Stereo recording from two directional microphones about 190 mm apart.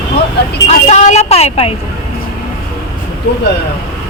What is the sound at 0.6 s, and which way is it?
A woman's voice, 35° left (ahead or behind).